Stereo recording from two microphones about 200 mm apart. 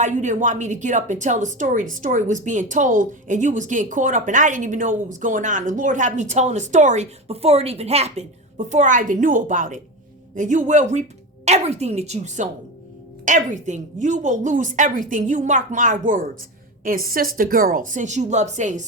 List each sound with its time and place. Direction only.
0.0 s a woman's voice: 35° right (ahead or behind)